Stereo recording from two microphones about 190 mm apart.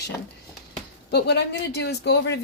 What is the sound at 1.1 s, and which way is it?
Speech, 60° left (ahead or behind).